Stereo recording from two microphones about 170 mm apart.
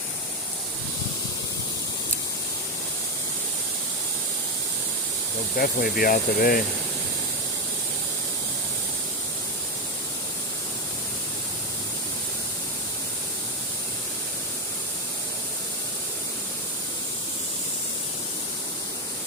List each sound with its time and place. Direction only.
5.5 s speech: 60° left (ahead or behind)